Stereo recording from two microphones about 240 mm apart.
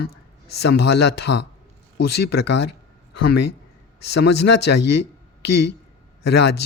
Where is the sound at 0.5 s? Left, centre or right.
Left.